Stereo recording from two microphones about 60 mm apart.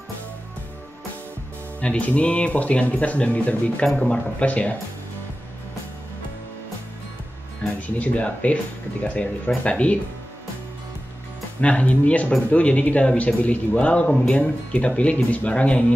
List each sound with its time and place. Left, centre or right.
1.8 s speech: left
7.8 s speech: left
11.6 s speech: left